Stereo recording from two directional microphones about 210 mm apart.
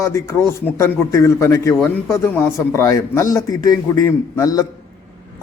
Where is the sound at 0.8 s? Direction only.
15° left (ahead or behind).